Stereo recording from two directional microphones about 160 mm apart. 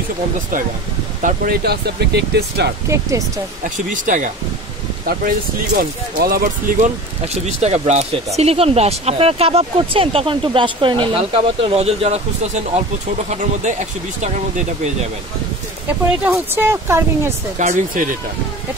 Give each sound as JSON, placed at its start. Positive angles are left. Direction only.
{"t": 1.2, "sound": "speech", "side_deg": -65}
{"t": 2.9, "sound": "speech", "side_deg": -20}
{"t": 3.9, "sound": "speech", "side_deg": -55}
{"t": 5.8, "sound": "speech", "side_deg": -70}
{"t": 7.4, "sound": "speech", "side_deg": -45}
{"t": 16.3, "sound": "speech", "side_deg": -15}
{"t": 17.6, "sound": "speech", "side_deg": -55}